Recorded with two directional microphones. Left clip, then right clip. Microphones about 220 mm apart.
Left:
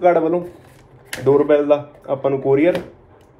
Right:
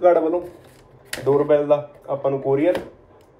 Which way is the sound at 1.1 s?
50° left (ahead or behind).